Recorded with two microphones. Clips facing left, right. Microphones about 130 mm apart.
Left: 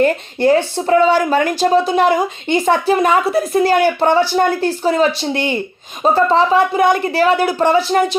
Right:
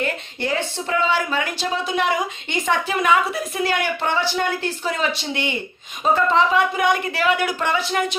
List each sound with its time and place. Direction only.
0.0 s speech: 40° left (ahead or behind)